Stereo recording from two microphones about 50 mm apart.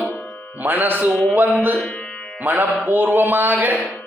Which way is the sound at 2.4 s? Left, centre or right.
Right.